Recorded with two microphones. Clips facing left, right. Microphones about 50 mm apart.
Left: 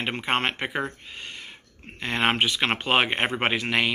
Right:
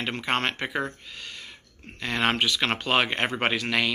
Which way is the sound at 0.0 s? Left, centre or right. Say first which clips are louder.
Left 1 dB; left.